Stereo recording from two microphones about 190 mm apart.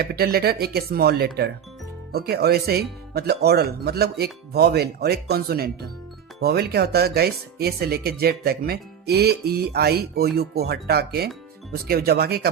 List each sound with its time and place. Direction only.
0.0 s speech: 55° right (ahead or behind)